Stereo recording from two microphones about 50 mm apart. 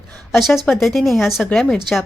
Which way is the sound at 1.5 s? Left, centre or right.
Centre.